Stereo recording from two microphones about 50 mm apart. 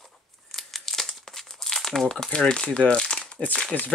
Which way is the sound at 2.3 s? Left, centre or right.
Centre.